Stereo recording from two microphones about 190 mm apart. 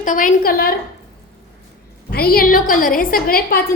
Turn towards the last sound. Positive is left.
turn(degrees=50)  # may be behind; listen again after turning